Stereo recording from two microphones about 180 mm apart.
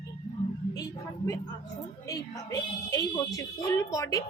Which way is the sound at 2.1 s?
20° left (ahead or behind).